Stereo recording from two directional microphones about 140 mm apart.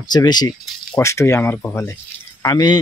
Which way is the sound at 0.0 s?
30° left (ahead or behind).